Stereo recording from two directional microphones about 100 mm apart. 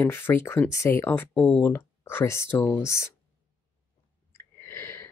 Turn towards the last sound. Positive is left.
turn(degrees=25)  # may be behind; listen again after turning